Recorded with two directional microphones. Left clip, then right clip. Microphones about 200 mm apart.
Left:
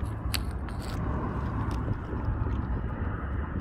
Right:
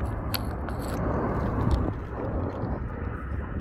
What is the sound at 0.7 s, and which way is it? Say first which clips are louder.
Vehicle: right 6 dB; 35° left (ahead or behind).